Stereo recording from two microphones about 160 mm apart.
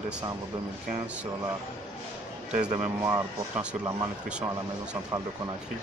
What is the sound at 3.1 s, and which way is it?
Speech, 20° right (ahead or behind).